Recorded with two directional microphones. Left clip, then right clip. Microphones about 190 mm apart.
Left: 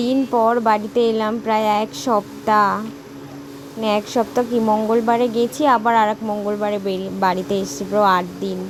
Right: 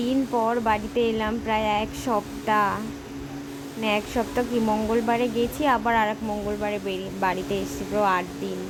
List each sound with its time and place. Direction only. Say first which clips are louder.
0.0 s a woman's voice: left 7 dB; 30° left (ahead or behind)
4.2 s speech: left 6 dB; 25° left (ahead or behind)